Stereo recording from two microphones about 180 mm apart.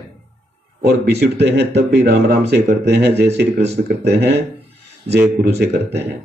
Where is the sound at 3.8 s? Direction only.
55° right (ahead or behind).